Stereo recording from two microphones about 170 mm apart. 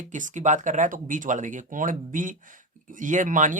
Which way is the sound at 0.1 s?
45° right (ahead or behind).